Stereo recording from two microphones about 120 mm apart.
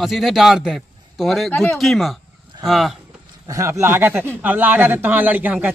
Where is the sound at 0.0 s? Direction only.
Centre (ahead or behind).